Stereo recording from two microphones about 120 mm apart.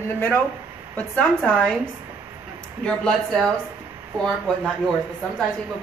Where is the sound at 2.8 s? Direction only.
5° left (ahead or behind).